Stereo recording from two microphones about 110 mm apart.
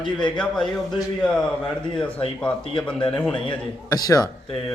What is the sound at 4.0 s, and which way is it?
Speech, 35° left (ahead or behind).